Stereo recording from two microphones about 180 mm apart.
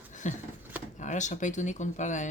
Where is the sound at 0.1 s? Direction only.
45° left (ahead or behind).